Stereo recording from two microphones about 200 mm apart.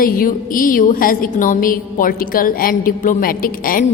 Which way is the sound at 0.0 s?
45° left (ahead or behind).